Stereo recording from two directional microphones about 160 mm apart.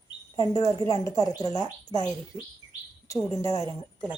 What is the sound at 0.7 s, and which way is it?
Speech, 20° left (ahead or behind).